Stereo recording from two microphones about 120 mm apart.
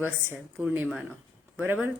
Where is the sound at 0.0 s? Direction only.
15° right (ahead or behind).